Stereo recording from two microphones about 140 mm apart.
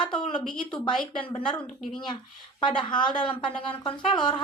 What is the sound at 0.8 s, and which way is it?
Speech, 35° left (ahead or behind).